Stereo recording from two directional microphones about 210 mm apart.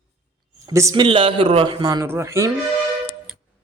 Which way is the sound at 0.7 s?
15° right (ahead or behind).